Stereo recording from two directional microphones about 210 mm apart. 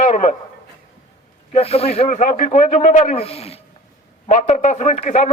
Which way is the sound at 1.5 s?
30° left (ahead or behind).